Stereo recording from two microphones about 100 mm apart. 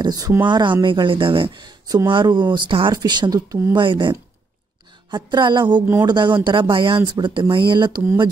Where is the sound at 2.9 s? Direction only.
45° right (ahead or behind).